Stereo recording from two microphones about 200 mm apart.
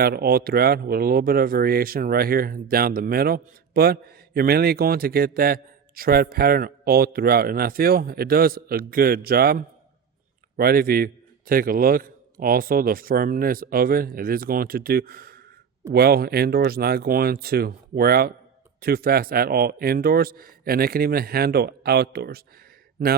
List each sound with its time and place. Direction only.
0.0 s speech: 50° right (ahead or behind)